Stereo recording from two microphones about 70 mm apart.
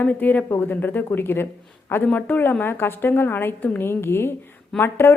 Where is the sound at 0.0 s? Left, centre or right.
Left.